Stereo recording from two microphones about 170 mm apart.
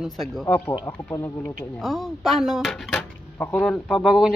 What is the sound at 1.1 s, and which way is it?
Speech, 15° left (ahead or behind).